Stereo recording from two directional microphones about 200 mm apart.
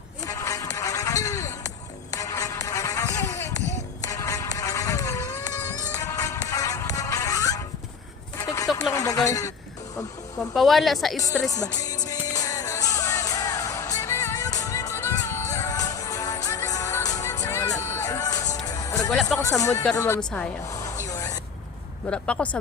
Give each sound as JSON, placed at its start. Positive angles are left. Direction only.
{"t": 0.3, "sound": "music", "side_deg": 15}
{"t": 8.4, "sound": "a sound", "side_deg": 15}
{"t": 10.5, "sound": "speech", "side_deg": 0}
{"t": 11.5, "sound": "music", "side_deg": 20}
{"t": 19.4, "sound": "speech", "side_deg": 15}
{"t": 20.1, "sound": "speech", "side_deg": 5}
{"t": 20.7, "sound": "a sound", "side_deg": 15}
{"t": 21.1, "sound": "vehicle", "side_deg": 20}
{"t": 22.0, "sound": "speech", "side_deg": 5}